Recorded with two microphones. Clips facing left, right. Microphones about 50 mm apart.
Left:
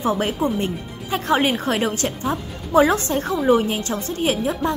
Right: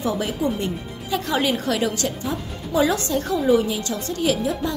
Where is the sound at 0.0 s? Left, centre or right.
Left.